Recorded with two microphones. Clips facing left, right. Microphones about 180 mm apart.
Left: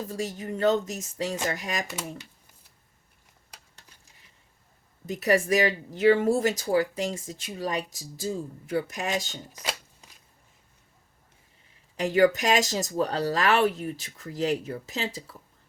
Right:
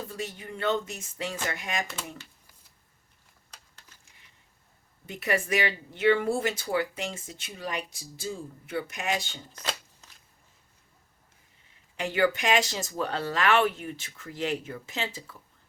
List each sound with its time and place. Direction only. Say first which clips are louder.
0.1 s speech: left 5 dB; 40° left (ahead or behind)
5.0 s speech: left 6 dB; 40° left (ahead or behind)
9.6 s shuffling cards: even; 15° left (ahead or behind)
11.9 s speech: left 5 dB; 40° left (ahead or behind)